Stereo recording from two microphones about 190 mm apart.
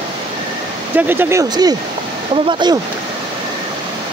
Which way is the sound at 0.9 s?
10° right (ahead or behind).